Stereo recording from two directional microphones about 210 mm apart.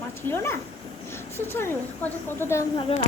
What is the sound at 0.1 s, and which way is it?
Speech, 10° left (ahead or behind).